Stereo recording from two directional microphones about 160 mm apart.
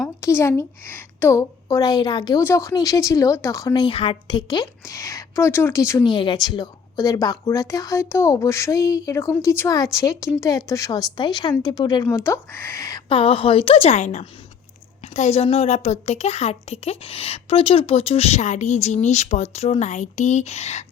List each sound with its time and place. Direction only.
0.2 s speech: 15° left (ahead or behind)
2.4 s speech: 15° left (ahead or behind)
3.8 s speech: 35° left (ahead or behind); by 6.1 s 15° left (ahead or behind)
6.1 s speech: 30° left (ahead or behind)
13.1 s a woman's voice: 35° left (ahead or behind)